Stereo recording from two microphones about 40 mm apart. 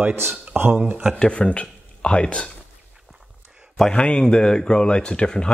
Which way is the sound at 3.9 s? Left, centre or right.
Left.